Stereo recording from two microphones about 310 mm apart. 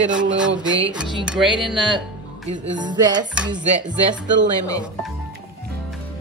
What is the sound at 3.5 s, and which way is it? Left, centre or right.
Speech, centre.